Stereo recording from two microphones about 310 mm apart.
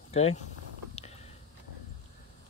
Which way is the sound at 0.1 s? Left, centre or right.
Centre.